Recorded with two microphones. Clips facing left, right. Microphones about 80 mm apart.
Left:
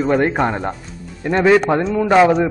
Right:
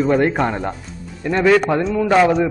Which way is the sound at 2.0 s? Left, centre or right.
Centre.